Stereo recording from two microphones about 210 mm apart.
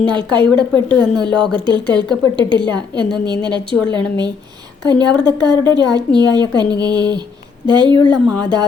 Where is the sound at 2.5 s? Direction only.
20° right (ahead or behind).